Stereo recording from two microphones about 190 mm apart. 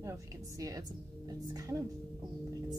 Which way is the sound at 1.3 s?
20° right (ahead or behind).